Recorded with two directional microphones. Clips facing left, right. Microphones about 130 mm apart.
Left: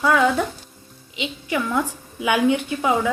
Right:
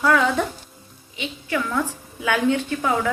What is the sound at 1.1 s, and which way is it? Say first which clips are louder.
A woman's voice: left 1 dB; 15° left (ahead or behind).